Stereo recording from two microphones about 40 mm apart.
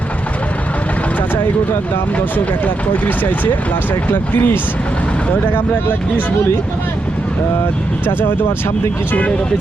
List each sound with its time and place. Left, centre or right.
4.1 s speech: left
8.0 s speech: left